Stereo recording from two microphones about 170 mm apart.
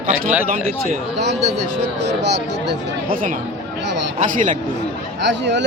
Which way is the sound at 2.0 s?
85° right.